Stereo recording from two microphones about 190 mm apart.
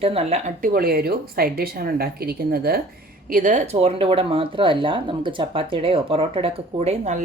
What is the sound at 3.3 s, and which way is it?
Speech, 40° right (ahead or behind).